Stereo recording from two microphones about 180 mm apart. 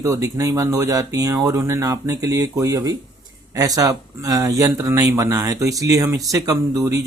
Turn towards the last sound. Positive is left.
turn(degrees=-20)  # may be behind; listen again after turning